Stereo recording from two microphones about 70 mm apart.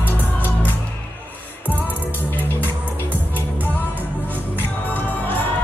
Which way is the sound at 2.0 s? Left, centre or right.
Left.